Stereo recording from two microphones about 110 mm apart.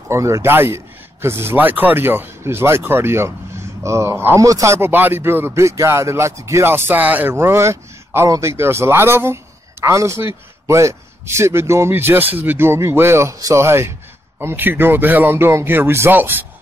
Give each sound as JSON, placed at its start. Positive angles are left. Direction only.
{"t": 0.1, "sound": "speech", "side_deg": -25}